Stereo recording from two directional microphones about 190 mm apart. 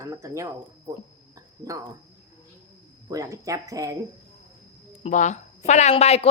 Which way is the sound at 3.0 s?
15° right (ahead or behind).